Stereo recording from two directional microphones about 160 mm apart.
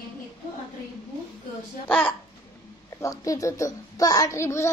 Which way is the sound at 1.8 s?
10° left (ahead or behind).